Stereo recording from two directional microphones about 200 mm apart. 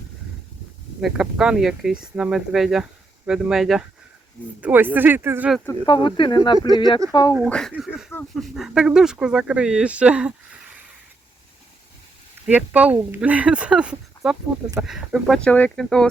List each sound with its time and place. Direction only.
1.0 s speech: 5° right (ahead or behind)
5.8 s speech: 25° left (ahead or behind)
7.3 s speech: centre (ahead or behind)
12.5 s speech: 5° right (ahead or behind)